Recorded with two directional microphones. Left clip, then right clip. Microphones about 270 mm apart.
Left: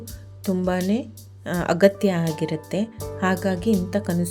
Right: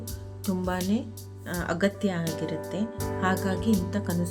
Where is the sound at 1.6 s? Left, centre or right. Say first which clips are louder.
Left 10 dB; left.